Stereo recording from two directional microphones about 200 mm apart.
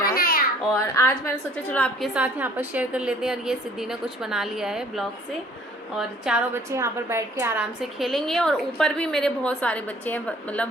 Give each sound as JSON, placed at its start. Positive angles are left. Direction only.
{"t": 0.0, "sound": "babbling", "side_deg": 45}
{"t": 0.7, "sound": "a woman's voice", "side_deg": 15}
{"t": 2.1, "sound": "a woman's voice", "side_deg": -10}